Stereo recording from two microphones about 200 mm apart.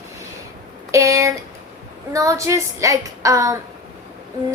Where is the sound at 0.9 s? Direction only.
15° right (ahead or behind).